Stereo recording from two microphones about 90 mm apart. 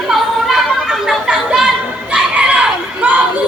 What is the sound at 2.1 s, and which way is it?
Crowd, 10° right (ahead or behind).